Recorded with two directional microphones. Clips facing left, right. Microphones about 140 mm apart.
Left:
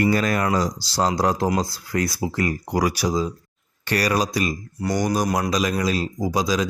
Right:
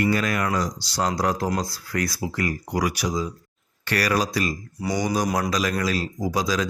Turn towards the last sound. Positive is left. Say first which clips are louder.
# left 2 dB
turn(degrees=15)  # may be behind; listen again after turning